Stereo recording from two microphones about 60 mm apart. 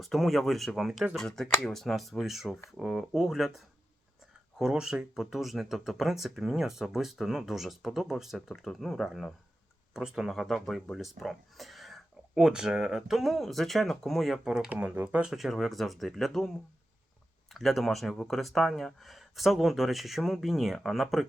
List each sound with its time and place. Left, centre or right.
0.0 s speech: centre
9.9 s speech: centre
14.4 s speech: centre
14.7 s speech: right
15.3 s speech: centre